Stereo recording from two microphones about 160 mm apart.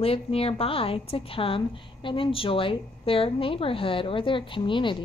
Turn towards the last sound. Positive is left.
turn(degrees=30)  # may be behind; listen again after turning